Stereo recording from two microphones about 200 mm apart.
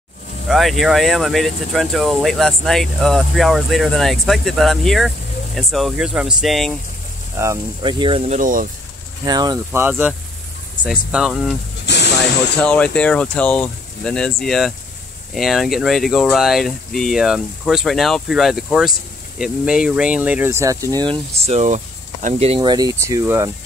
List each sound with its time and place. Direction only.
0.5 s speech: centre (ahead or behind)
7.3 s speech: 20° right (ahead or behind)
8.4 s speech: 45° right (ahead or behind)
9.2 s speech: 20° right (ahead or behind); by 11.5 s 5° right (ahead or behind)
11.8 s snake: 60° left (ahead or behind)
12.5 s speech: 5° left (ahead or behind); by 23.5 s 15° right (ahead or behind)